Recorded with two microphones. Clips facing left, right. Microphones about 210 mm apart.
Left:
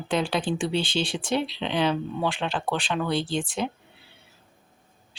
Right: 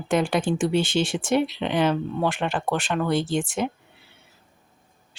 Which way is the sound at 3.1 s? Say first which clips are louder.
Right 3 dB; 50° right (ahead or behind).